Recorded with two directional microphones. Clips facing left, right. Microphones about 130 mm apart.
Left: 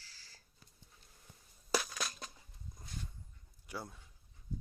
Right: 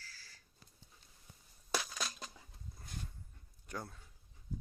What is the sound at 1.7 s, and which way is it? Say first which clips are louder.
Crushing: left 3 dB; 5° left (ahead or behind).